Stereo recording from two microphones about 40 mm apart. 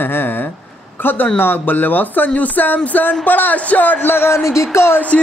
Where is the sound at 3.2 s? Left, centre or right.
Left.